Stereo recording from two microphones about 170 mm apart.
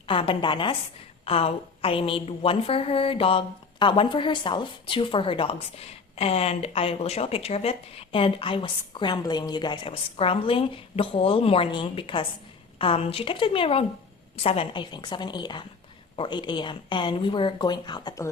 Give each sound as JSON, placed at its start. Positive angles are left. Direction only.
{"t": 0.1, "sound": "a woman's voice", "side_deg": 30}